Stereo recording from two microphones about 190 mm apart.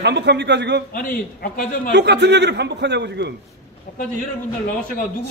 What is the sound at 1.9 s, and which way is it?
A man's voice, 65° right (ahead or behind).